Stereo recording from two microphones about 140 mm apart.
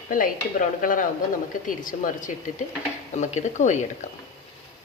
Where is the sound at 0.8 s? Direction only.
75° left (ahead or behind).